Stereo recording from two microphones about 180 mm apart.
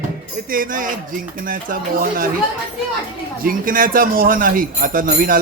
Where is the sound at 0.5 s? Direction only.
50° right (ahead or behind).